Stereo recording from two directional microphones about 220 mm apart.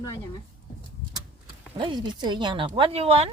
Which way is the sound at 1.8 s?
20° right (ahead or behind).